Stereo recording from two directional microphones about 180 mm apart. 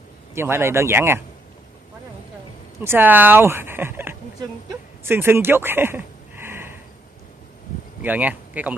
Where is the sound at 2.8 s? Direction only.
10° right (ahead or behind).